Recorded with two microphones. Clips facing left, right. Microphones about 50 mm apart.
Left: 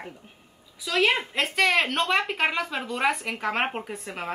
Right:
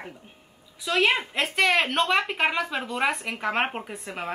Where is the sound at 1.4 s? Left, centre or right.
Centre.